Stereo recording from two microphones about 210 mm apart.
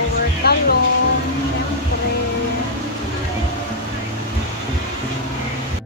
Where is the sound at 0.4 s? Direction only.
50° left (ahead or behind).